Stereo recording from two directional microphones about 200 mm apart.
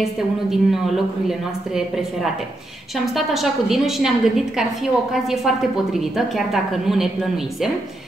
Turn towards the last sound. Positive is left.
turn(degrees=0)  # may be behind; listen again after turning